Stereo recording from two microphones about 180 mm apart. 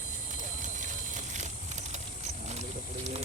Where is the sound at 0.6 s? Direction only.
45° right (ahead or behind).